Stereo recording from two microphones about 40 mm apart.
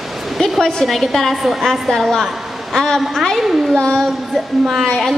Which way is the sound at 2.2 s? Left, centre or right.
Centre.